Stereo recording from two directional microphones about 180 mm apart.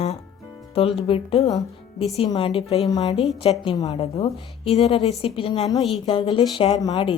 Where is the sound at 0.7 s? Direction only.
30° left (ahead or behind).